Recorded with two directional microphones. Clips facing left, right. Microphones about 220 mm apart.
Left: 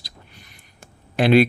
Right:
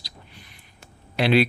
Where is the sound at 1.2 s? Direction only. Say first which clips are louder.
Left 4 dB; 50° left (ahead or behind).